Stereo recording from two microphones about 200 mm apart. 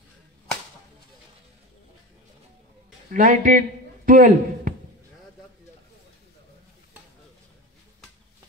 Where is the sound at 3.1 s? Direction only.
40° right (ahead or behind).